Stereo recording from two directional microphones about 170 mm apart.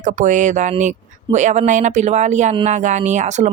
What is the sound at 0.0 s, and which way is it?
Speech, 45° right (ahead or behind).